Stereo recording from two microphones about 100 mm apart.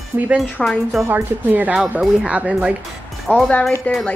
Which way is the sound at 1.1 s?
15° right (ahead or behind).